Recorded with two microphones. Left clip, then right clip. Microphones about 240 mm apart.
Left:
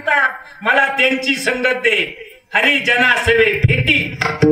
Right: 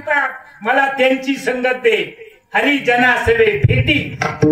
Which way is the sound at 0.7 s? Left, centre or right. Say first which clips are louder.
Even; left.